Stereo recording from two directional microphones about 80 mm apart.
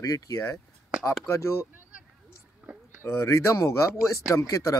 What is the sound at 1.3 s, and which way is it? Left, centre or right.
Speech, left.